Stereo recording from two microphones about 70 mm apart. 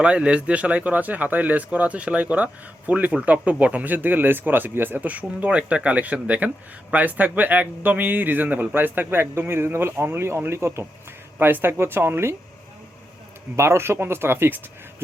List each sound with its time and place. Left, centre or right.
0.0 s speech: centre; by 12.4 s right
13.6 s speech: right